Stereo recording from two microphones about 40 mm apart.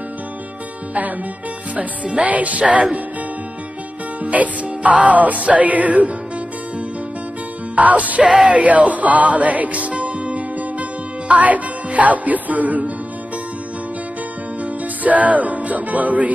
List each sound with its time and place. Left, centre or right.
1.8 s music: right
4.2 s music: right
7.7 s music: right
14.6 s music: right